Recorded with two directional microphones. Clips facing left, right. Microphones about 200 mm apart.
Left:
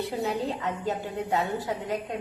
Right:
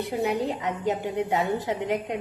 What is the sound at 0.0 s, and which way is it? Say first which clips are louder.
A woman's voice: right 3 dB; 20° right (ahead or behind).